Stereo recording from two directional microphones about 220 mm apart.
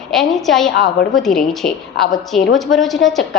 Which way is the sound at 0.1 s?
Centre (ahead or behind).